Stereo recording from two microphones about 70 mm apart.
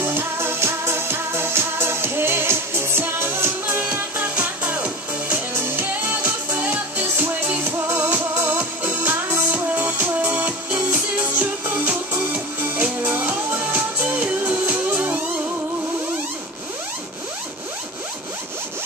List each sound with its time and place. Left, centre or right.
0.0 s music: right